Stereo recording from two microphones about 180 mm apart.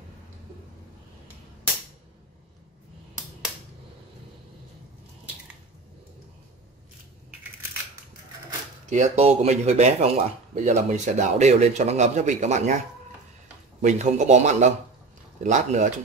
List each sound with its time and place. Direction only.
8.8 s speech: 40° right (ahead or behind)